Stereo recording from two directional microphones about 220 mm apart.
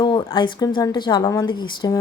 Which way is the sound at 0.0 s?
20° left (ahead or behind).